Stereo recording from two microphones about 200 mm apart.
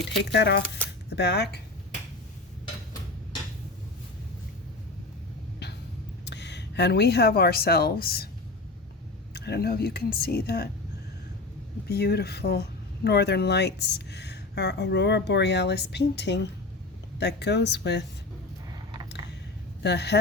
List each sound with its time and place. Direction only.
0.2 s speech: 60° left (ahead or behind)
6.2 s speech: 60° left (ahead or behind)
9.3 s speech: 55° left (ahead or behind)
11.9 s speech: 55° left (ahead or behind)
19.8 s speech: 60° left (ahead or behind)